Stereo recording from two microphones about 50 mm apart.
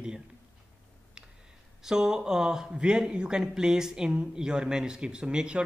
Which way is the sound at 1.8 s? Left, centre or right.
Centre.